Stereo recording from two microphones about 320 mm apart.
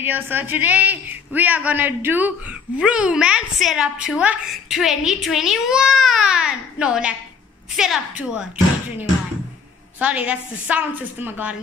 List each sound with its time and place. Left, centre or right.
0.0 s a woman's voice: centre
9.9 s a woman's voice: centre